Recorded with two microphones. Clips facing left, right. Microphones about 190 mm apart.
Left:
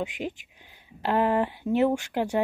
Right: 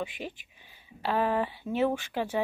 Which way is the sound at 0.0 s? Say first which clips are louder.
Left 5 dB; 15° left (ahead or behind).